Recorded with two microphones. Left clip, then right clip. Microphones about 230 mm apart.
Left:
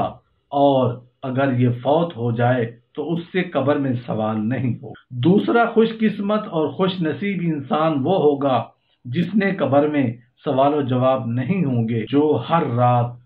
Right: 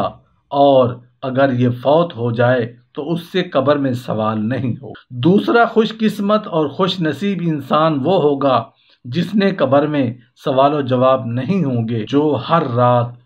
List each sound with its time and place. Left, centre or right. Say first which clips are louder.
0.0 s speech: right 3 dB; right